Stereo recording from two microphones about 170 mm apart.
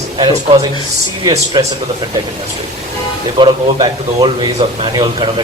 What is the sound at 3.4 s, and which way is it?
Speech, 30° right (ahead or behind).